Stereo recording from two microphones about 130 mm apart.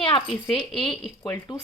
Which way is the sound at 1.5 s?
35° left (ahead or behind).